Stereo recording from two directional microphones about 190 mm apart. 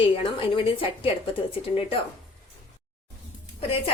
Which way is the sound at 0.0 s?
30° left (ahead or behind).